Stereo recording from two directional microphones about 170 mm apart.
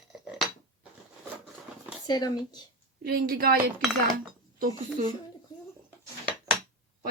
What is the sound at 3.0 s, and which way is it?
Speech, 65° right (ahead or behind).